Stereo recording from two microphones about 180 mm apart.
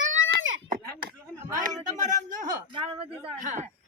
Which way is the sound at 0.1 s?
90° right.